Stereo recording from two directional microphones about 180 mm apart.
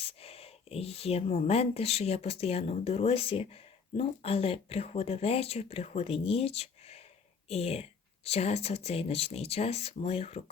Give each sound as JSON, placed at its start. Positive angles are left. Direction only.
{"t": 0.0, "sound": "speech", "side_deg": 35}